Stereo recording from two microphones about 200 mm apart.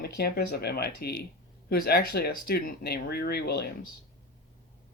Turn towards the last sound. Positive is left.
turn(degrees=55)  # may be behind; listen again after turning